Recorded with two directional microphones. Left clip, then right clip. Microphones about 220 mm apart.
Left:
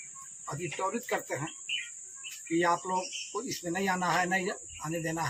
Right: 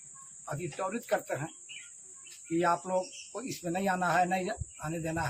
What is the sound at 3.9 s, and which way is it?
Speech, centre (ahead or behind).